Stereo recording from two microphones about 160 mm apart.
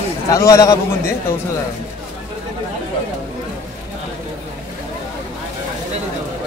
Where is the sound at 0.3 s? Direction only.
20° left (ahead or behind).